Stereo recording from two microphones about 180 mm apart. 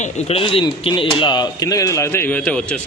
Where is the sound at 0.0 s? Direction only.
35° left (ahead or behind).